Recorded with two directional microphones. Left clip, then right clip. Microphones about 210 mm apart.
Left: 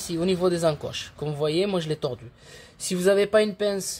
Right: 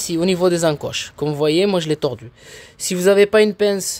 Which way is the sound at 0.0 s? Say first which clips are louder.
Right 7 dB; 45° right (ahead or behind).